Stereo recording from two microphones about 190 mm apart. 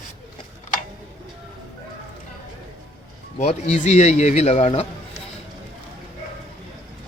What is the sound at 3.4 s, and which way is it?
Speech, 30° left (ahead or behind).